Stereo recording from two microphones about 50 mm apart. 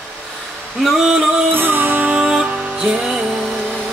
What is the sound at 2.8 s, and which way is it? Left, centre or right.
Music, centre.